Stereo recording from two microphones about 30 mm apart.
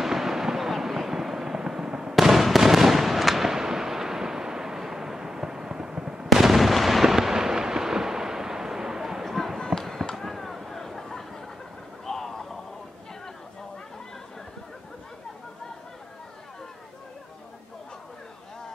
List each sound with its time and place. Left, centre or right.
0.0 s fireworks: centre
2.1 s fireworks: centre
3.5 s artillery fire: centre
6.2 s artillery fire: centre
9.2 s basketball bounce: centre
10.1 s a sound: centre